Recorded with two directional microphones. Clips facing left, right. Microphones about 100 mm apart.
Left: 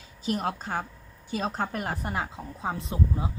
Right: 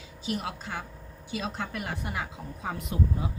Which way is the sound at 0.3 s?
40° left (ahead or behind).